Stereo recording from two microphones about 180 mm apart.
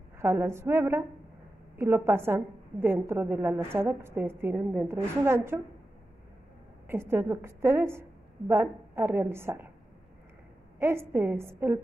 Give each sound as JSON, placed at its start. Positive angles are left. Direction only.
{"t": 0.2, "sound": "a woman's voice", "side_deg": -15}
{"t": 6.9, "sound": "a woman's voice", "side_deg": -15}
{"t": 10.8, "sound": "a woman's voice", "side_deg": -15}